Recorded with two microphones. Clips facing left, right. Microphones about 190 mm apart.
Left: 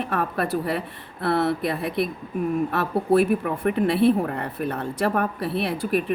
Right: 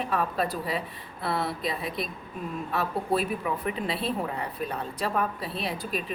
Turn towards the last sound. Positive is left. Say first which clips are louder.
# left 8 dB
turn(degrees=60)  # may be behind; listen again after turning